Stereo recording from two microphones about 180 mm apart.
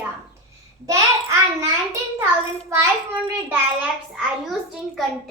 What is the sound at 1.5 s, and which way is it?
Child singing, 15° right (ahead or behind).